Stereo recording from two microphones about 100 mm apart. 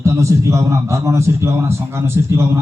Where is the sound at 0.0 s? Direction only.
30° right (ahead or behind).